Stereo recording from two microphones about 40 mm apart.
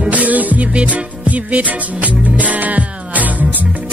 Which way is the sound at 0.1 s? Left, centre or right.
Right.